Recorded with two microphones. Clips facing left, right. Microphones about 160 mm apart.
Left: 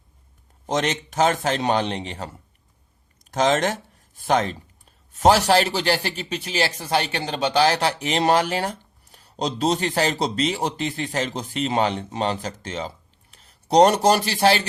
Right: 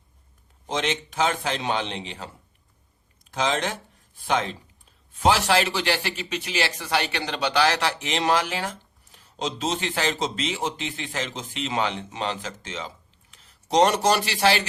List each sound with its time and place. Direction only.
0.7 s a man's voice: 40° left (ahead or behind)
3.3 s a man's voice: 45° left (ahead or behind)